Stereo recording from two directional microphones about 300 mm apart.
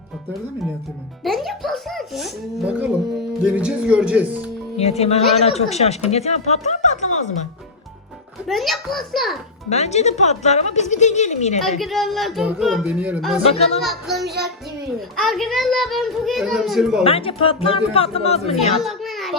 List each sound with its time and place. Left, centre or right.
1.2 s a child's voice: centre
4.8 s speech: left
8.4 s a child's voice: centre
9.6 s speech: left
11.8 s a child's voice: centre
13.4 s speech: centre
13.8 s a child's voice: centre
17.0 s speech: centre
18.5 s a child's voice: centre